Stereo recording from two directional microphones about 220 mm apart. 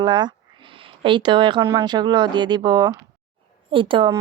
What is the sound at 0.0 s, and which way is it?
A woman's voice, 20° right (ahead or behind).